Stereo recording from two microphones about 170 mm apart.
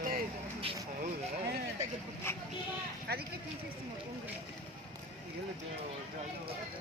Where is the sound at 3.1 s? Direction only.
70° right (ahead or behind).